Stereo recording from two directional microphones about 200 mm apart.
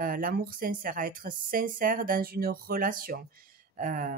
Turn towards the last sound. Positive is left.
turn(degrees=-45)  # may be behind; listen again after turning